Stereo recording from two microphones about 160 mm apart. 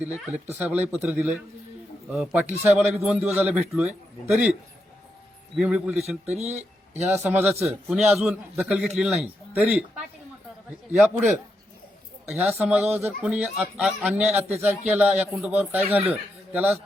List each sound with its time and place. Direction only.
0.0 s a man's voice: 10° right (ahead or behind)
5.5 s a man's voice: 5° right (ahead or behind)
6.4 s speech: 45° right (ahead or behind)
7.3 s a man's voice: 10° right (ahead or behind)
12.3 s a man's voice: 5° right (ahead or behind)
15.8 s speech: 40° right (ahead or behind)
16.0 s speech: 10° right (ahead or behind)